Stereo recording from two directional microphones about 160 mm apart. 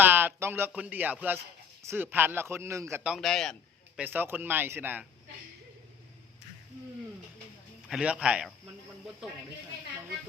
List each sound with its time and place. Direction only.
0.0 s speech: 10° right (ahead or behind)
3.0 s a man's voice: centre (ahead or behind)
4.0 s speech: 10° right (ahead or behind)
7.9 s speech: 5° right (ahead or behind)